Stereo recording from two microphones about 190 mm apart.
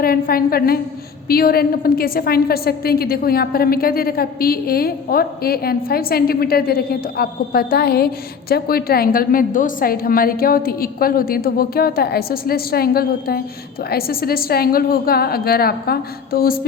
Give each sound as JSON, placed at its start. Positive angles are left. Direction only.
{"t": 0.0, "sound": "a woman's voice", "side_deg": 50}